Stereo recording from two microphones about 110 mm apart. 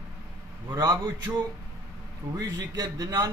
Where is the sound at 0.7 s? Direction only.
40° right (ahead or behind).